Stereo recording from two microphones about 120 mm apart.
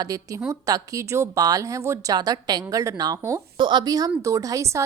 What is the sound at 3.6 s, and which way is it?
A woman's voice, 40° right (ahead or behind).